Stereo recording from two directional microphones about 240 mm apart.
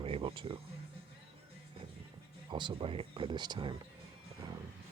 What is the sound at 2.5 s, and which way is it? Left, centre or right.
Speech, centre.